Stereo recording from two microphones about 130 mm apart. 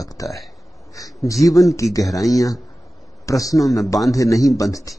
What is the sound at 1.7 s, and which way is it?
Speech, 25° left (ahead or behind).